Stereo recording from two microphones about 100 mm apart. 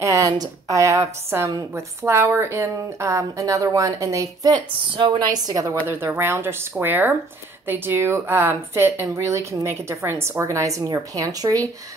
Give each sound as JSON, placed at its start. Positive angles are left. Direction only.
{"t": 0.0, "sound": "a woman's voice", "side_deg": -35}
{"t": 5.9, "sound": "speech", "side_deg": -25}